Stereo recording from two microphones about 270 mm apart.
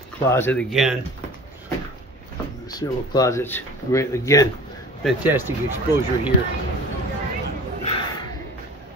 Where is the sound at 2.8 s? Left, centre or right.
Centre.